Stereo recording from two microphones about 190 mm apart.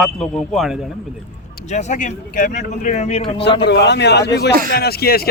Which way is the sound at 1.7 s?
35° left (ahead or behind).